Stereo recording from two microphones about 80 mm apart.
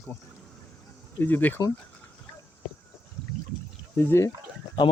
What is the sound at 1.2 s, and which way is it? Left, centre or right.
Speech, left.